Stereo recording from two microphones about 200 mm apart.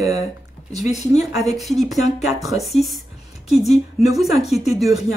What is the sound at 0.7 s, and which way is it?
A woman's voice, centre (ahead or behind).